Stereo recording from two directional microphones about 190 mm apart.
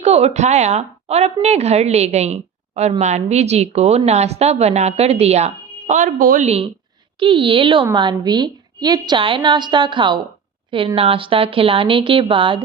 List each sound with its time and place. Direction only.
0.0 s a woman's voice: 35° right (ahead or behind)